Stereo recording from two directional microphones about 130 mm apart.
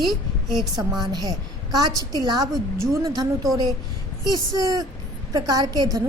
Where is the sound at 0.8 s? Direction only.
30° right (ahead or behind).